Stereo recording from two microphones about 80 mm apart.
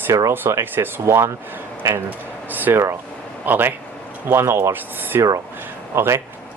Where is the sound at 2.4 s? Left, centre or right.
Right.